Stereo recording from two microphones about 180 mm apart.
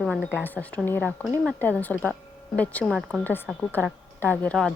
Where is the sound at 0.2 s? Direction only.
10° left (ahead or behind).